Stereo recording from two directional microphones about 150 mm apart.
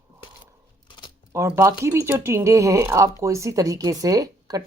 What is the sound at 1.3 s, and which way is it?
Speech, 20° right (ahead or behind).